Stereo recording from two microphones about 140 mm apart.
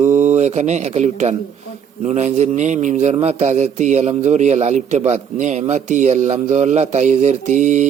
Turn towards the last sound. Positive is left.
turn(degrees=-60)  # may be behind; listen again after turning